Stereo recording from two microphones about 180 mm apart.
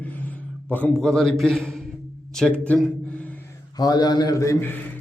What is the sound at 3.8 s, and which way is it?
A man's voice, 20° left (ahead or behind).